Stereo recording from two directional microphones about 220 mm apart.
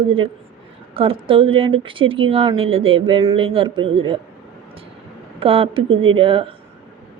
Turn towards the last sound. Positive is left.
turn(degrees=-25)  # may be behind; listen again after turning